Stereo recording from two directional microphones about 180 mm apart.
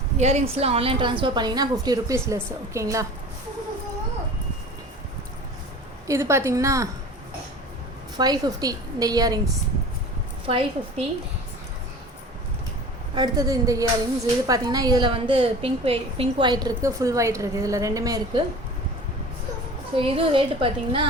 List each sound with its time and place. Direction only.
0.2 s a woman's voice: 35° right (ahead or behind); by 3.1 s 15° right (ahead or behind)
6.1 s a woman's voice: 15° right (ahead or behind)
8.1 s a woman's voice: 20° right (ahead or behind)
10.4 s a woman's voice: 30° right (ahead or behind)
13.1 s a woman's voice: 20° right (ahead or behind)
20.0 s a woman's voice: 30° right (ahead or behind)